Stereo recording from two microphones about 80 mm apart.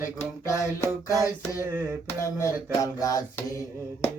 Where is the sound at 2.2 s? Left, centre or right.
Left.